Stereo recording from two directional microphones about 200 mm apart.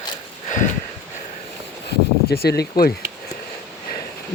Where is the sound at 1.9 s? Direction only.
50° left (ahead or behind).